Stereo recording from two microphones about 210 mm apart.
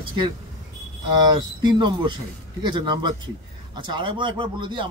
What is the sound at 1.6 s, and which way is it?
Speech, 20° right (ahead or behind).